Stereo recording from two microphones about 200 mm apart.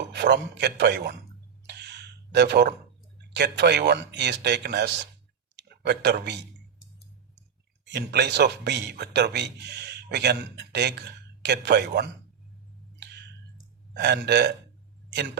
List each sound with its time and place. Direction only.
0.1 s a man's voice: 55° right (ahead or behind)
1.6 s a sound: 55° right (ahead or behind)
3.2 s speech: 55° right (ahead or behind)
7.9 s speech: 60° right (ahead or behind)
13.9 s speech: 60° right (ahead or behind)